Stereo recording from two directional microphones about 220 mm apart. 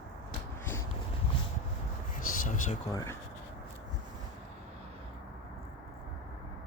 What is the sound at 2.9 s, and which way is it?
Speech, 15° left (ahead or behind).